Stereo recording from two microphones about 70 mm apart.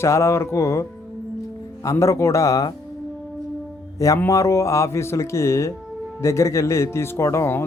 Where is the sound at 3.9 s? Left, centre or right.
Left.